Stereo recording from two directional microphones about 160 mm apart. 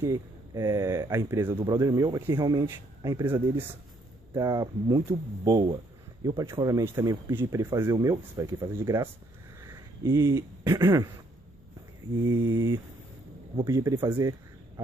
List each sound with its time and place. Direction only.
0.0 s speech: 20° right (ahead or behind)
12.3 s speech: 20° right (ahead or behind)